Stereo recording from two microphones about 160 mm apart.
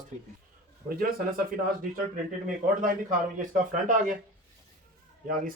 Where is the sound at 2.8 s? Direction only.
55° right (ahead or behind).